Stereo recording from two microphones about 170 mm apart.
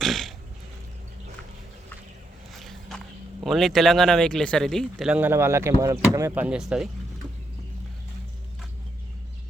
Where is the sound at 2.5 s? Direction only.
Centre (ahead or behind).